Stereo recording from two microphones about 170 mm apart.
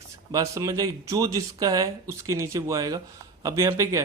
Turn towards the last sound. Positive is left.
turn(degrees=-15)  # may be behind; listen again after turning